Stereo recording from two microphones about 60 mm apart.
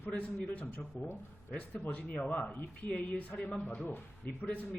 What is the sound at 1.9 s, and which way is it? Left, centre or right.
A man's voice, left.